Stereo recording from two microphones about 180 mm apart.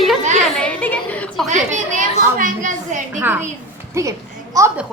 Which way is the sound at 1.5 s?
45° right (ahead or behind).